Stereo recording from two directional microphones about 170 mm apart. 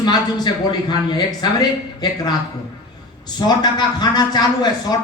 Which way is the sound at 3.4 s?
25° left (ahead or behind).